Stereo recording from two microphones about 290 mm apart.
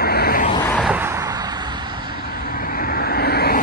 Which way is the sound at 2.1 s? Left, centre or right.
Left.